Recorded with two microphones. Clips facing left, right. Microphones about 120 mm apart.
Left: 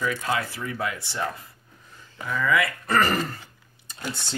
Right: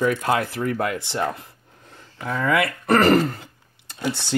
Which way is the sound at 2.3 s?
55° right (ahead or behind).